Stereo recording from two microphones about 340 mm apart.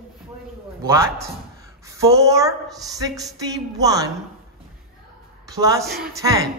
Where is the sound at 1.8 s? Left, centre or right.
Centre.